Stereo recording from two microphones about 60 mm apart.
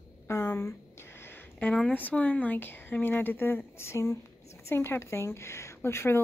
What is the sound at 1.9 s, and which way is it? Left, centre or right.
Speech, left.